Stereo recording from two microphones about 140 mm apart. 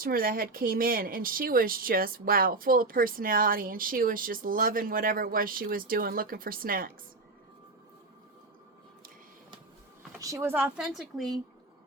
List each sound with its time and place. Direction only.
0.0 s speech: 90° right
10.2 s speech: 20° right (ahead or behind); by 11.3 s centre (ahead or behind)